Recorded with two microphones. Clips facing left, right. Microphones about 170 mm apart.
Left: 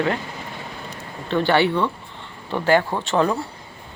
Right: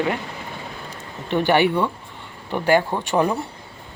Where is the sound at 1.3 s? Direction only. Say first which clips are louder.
Right 1 dB; 15° right (ahead or behind).